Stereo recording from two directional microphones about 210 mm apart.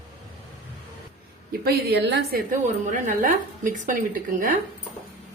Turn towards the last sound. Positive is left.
turn(degrees=-40)  # may be behind; listen again after turning